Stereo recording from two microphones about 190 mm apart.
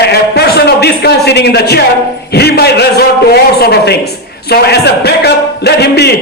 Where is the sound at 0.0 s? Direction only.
60° left (ahead or behind).